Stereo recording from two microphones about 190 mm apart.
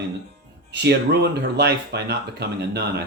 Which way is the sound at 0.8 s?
60° right (ahead or behind).